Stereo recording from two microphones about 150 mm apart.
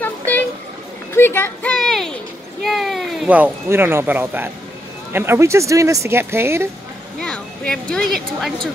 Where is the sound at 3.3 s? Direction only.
15° right (ahead or behind).